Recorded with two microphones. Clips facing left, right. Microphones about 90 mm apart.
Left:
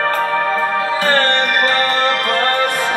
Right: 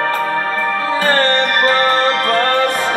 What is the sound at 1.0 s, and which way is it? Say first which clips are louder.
Music: right 2 dB; 35° right (ahead or behind).